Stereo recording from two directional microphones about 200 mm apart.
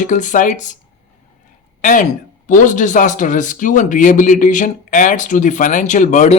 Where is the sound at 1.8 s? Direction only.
40° left (ahead or behind).